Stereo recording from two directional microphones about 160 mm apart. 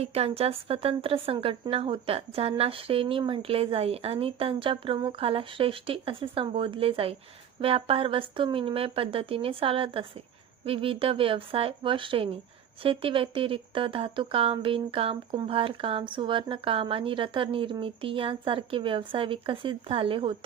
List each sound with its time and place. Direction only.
0.0 s speech: 40° right (ahead or behind)